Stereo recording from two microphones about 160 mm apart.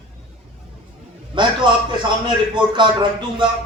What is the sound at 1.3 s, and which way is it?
A man's voice, 30° right (ahead or behind).